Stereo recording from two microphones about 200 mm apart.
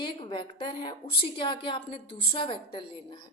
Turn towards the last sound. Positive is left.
turn(degrees=25)  # may be behind; listen again after turning